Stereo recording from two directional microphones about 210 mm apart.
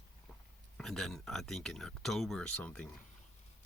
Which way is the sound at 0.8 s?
Centre (ahead or behind).